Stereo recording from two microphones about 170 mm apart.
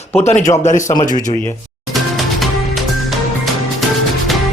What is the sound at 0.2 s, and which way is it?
Speech, 45° left (ahead or behind).